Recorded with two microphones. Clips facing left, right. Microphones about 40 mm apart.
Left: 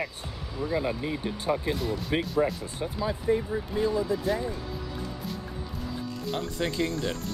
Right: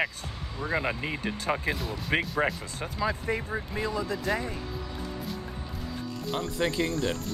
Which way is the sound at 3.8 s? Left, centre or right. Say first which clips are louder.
Left 4 dB; right.